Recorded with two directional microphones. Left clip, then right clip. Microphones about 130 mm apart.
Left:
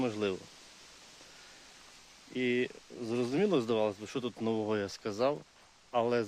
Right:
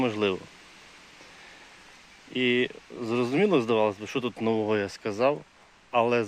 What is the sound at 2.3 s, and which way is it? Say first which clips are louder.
Speech: right 7 dB; 20° left (ahead or behind).